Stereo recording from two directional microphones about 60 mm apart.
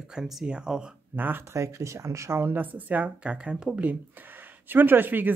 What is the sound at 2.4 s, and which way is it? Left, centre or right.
Speech, right.